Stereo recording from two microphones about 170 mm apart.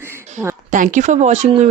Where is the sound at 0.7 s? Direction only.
45° right (ahead or behind).